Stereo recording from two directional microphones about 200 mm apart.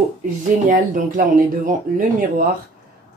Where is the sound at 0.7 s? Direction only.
40° right (ahead or behind).